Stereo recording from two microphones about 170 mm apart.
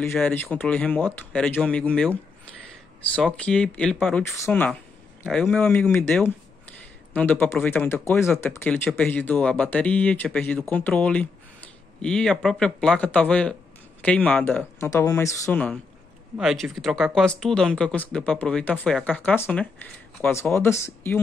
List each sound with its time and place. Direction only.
0.1 s speech: 10° left (ahead or behind)
3.3 s speech: 5° left (ahead or behind)
16.3 s speech: centre (ahead or behind); by 21.2 s 15° left (ahead or behind)